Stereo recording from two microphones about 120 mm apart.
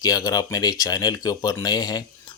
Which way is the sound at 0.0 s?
30° left (ahead or behind).